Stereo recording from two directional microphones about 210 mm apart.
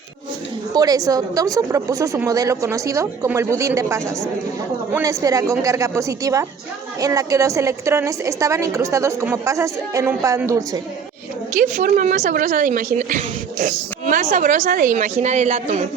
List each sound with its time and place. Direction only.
0.7 s a woman's voice: 20° right (ahead or behind)
11.6 s speech: 40° right (ahead or behind)